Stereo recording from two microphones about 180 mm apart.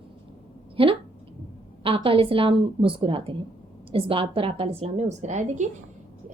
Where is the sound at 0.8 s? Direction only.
30° right (ahead or behind).